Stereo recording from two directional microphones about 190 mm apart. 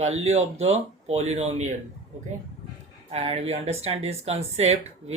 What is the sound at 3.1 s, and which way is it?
Speech, 30° right (ahead or behind).